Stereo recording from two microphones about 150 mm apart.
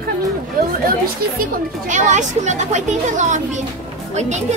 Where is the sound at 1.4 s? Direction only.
55° right (ahead or behind).